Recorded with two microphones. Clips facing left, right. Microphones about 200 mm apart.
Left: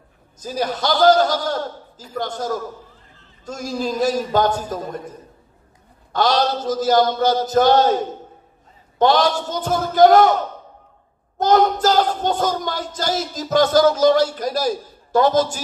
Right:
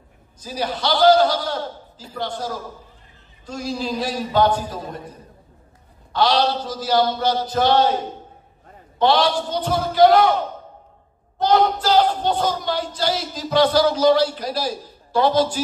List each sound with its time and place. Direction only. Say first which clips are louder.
0.4 s speech: left 2 dB; 45° left (ahead or behind)
6.1 s speech: even; 45° left (ahead or behind)
8.9 s speech: left 1 dB; 45° left (ahead or behind)